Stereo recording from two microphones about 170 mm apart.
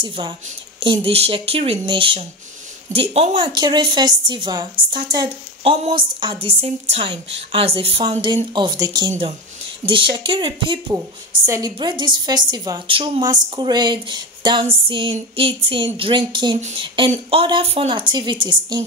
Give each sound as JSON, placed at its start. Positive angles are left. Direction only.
{"t": 0.0, "sound": "a woman's voice", "side_deg": -30}
{"t": 16.5, "sound": "a sound", "side_deg": -45}
{"t": 16.8, "sound": "a woman's voice", "side_deg": -30}